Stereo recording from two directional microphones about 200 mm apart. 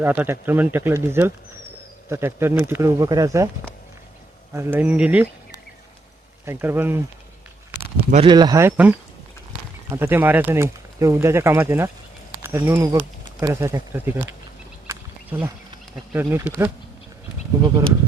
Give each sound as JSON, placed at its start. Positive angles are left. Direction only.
{"t": 0.0, "sound": "speech", "side_deg": -10}
{"t": 4.5, "sound": "speech", "side_deg": -10}
{"t": 6.4, "sound": "speech", "side_deg": -10}
{"t": 8.1, "sound": "speech", "side_deg": -25}
{"t": 14.8, "sound": "a sound", "side_deg": -10}
{"t": 16.1, "sound": "speech", "side_deg": -10}